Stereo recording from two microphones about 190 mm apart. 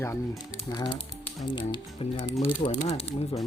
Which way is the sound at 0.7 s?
25° left (ahead or behind).